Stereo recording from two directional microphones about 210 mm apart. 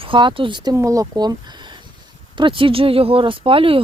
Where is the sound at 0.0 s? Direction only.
25° right (ahead or behind).